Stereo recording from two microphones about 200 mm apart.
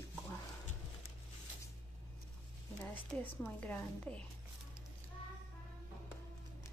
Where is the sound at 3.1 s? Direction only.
5° left (ahead or behind).